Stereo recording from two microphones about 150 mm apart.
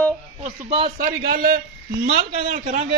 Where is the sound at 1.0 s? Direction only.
70° right (ahead or behind).